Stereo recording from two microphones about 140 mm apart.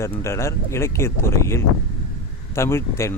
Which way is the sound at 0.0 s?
20° left (ahead or behind).